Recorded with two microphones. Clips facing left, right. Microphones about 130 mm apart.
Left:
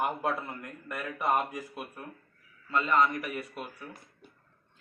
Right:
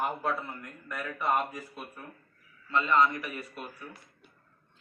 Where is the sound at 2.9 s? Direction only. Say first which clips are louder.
Right 1 dB; 10° left (ahead or behind).